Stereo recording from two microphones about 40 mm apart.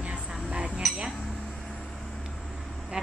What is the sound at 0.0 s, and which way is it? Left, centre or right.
Dishes, right.